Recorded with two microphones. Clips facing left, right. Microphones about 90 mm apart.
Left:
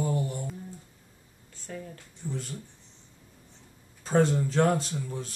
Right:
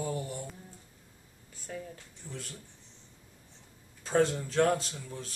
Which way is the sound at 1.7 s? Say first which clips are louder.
Left 1 dB; centre (ahead or behind).